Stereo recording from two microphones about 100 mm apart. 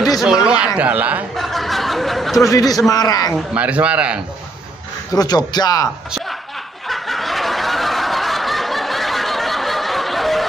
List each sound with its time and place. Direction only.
0.2 s a man's voice: 5° right (ahead or behind)
1.3 s a sound: centre (ahead or behind)
2.4 s speech: 35° left (ahead or behind)
3.5 s a man's voice: 15° right (ahead or behind)
5.1 s speech: 40° left (ahead or behind)
6.9 s snicker: centre (ahead or behind)